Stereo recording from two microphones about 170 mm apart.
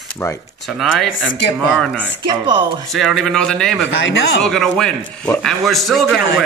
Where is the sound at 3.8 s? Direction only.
90° left.